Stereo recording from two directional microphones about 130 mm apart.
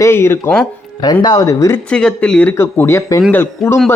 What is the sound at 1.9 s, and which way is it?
Speech, 5° left (ahead or behind).